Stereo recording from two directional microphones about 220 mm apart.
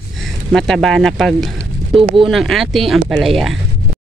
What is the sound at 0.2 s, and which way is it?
Speech, centre (ahead or behind).